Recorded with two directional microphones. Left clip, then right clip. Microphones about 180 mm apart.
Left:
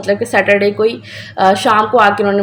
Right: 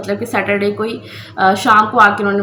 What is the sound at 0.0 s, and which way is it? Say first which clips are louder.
A woman's voice: left 5 dB; 40° left (ahead or behind).